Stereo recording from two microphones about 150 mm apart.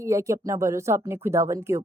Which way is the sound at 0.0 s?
20° right (ahead or behind).